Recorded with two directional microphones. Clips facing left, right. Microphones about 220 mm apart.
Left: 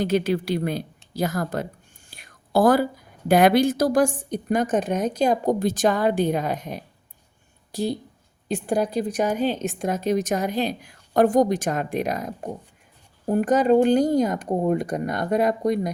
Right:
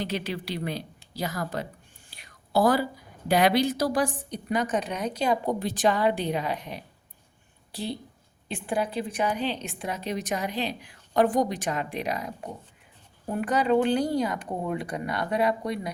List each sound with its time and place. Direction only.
0.0 s a woman's voice: 45° left (ahead or behind)
2.0 s whispering: 50° left (ahead or behind)
3.2 s a woman's voice: 50° left (ahead or behind)